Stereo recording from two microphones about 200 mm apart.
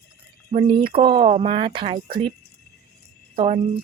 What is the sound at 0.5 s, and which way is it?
Speech, 30° right (ahead or behind).